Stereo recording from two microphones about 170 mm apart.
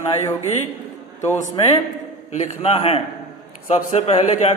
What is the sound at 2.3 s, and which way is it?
A man's voice, 40° left (ahead or behind).